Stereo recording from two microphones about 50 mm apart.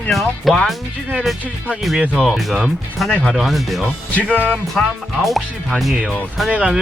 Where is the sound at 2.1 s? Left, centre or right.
Centre.